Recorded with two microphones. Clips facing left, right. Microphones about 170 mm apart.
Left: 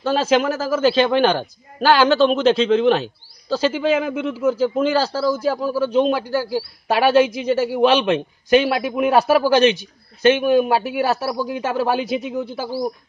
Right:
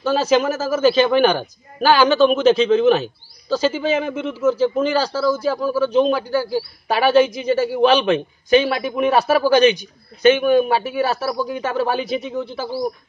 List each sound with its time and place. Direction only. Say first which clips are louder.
0.1 s a man's voice: right 1 dB; centre (ahead or behind)
5.1 s a man's voice: even; 35° left (ahead or behind)
5.8 s a man's voice: right 2 dB; 5° left (ahead or behind)